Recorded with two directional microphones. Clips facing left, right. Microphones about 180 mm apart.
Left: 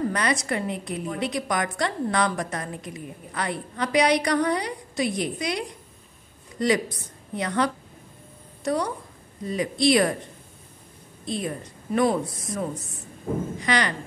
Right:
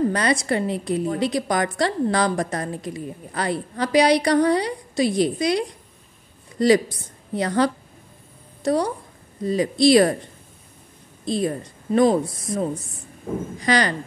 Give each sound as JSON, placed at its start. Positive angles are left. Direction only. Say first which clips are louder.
{"t": 0.1, "sound": "a woman's voice", "louder": "right 4 dB", "side_deg": -30}
{"t": 11.2, "sound": "a woman's voice", "louder": "right 6 dB", "side_deg": -35}